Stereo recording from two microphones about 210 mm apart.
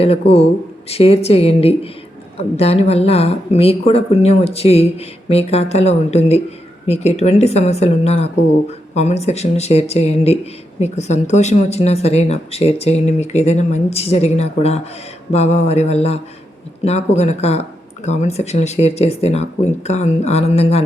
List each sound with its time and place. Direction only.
0.0 s speech: 25° left (ahead or behind)